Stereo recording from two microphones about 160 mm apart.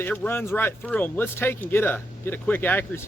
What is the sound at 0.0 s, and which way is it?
Speech, 10° left (ahead or behind).